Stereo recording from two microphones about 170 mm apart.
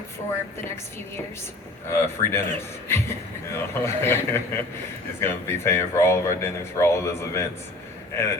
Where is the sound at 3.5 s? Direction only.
15° left (ahead or behind).